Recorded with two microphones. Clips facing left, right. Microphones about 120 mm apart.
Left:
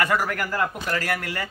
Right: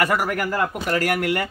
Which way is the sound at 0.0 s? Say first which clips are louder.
Right 2 dB; 10° right (ahead or behind).